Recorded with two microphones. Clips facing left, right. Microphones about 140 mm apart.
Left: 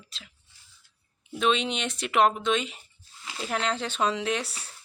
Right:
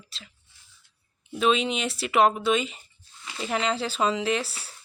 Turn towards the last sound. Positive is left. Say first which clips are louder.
# right 3 dB
turn(degrees=0)  # may be behind; listen again after turning